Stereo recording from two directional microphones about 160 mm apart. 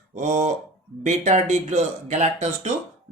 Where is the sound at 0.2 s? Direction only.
50° right (ahead or behind).